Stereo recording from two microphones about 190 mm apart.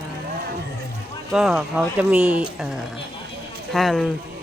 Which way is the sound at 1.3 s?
5° right (ahead or behind).